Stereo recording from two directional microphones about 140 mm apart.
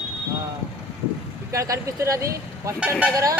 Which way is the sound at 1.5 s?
25° right (ahead or behind).